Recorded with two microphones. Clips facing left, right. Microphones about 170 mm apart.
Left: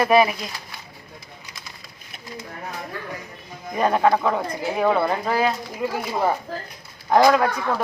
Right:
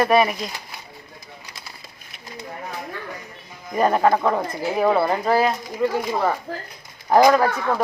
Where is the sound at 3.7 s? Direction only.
Centre (ahead or behind).